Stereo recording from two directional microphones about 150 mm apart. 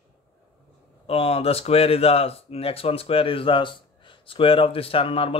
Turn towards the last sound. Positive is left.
turn(degrees=40)  # may be behind; listen again after turning